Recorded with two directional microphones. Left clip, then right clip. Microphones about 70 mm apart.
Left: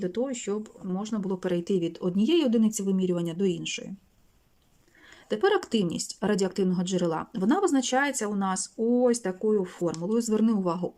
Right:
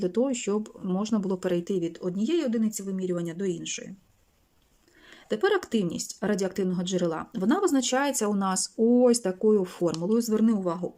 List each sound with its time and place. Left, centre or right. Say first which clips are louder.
0.0 s speech: right 3 dB; right
1.4 s speech: left 1 dB; centre
1.8 s speech: left 2 dB; left
2.8 s speech: left 3 dB; left
5.3 s speech: left 1 dB; centre
10.1 s speech: left 1 dB; centre